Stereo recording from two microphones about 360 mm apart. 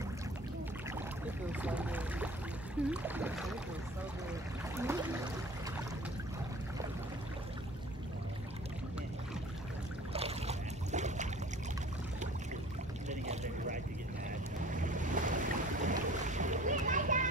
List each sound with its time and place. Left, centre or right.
1.5 s speech: centre
4.7 s a sound: centre
10.1 s boat: centre
13.1 s boat: centre
14.9 s boat: right